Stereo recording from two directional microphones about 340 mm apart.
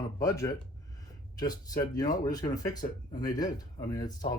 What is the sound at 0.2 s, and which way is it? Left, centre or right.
Speech, centre.